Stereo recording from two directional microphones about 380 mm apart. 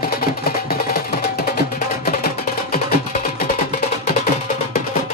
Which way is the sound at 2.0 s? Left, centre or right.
Left.